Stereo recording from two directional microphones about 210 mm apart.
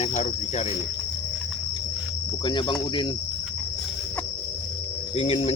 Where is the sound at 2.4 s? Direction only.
20° left (ahead or behind).